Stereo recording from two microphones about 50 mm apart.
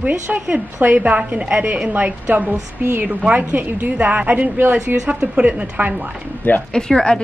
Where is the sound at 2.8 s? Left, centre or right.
Right.